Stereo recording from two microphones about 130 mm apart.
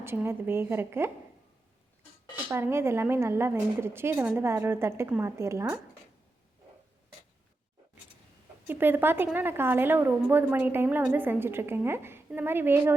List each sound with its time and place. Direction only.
0.0 s a woman's voice: 20° right (ahead or behind)
2.5 s a woman's voice: 20° right (ahead or behind)
8.6 s a woman's voice: 15° right (ahead or behind)